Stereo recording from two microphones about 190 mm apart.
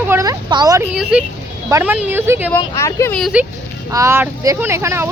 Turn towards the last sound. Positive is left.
turn(degrees=-15)  # may be behind; listen again after turning